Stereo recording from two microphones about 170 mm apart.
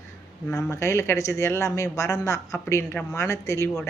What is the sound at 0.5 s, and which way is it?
Speech, 15° left (ahead or behind).